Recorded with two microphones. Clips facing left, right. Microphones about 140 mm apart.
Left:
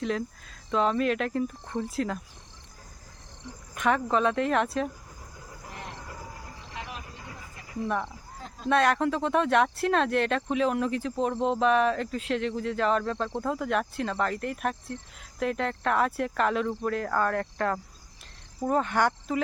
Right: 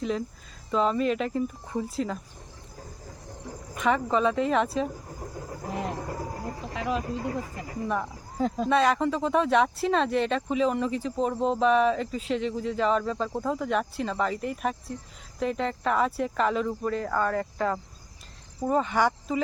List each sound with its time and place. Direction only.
0.7 s speech: centre (ahead or behind)
3.8 s speech: centre (ahead or behind)
6.0 s a sound: 45° right (ahead or behind)
8.7 s speech: centre (ahead or behind)